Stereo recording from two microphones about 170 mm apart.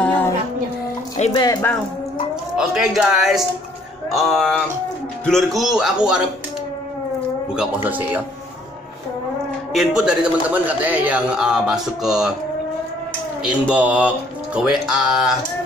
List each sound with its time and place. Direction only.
1.3 s speech: 25° left (ahead or behind)
2.5 s a man's voice: 5° right (ahead or behind)
7.5 s speech: 5° right (ahead or behind)
9.7 s a man's voice: centre (ahead or behind)
13.4 s speech: 10° right (ahead or behind)